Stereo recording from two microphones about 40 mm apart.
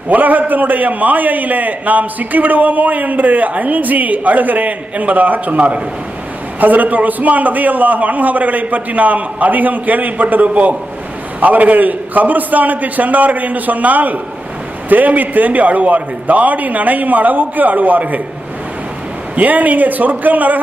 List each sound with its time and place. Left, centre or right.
0.1 s a man's voice: right
19.4 s a man's voice: right